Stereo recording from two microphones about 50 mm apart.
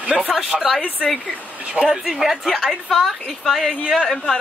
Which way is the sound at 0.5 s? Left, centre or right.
Centre.